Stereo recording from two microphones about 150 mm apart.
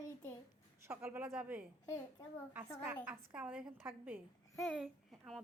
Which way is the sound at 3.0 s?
10° right (ahead or behind).